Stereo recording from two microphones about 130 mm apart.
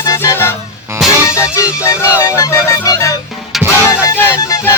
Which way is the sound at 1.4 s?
20° left (ahead or behind).